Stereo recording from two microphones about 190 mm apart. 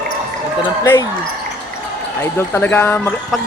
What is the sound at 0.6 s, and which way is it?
Speech, 20° left (ahead or behind).